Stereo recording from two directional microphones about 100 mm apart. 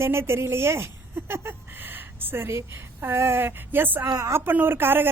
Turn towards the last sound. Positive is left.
turn(degrees=-20)  # may be behind; listen again after turning